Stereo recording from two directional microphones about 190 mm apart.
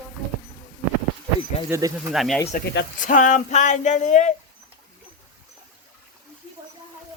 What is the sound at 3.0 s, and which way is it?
Speech, 40° left (ahead or behind).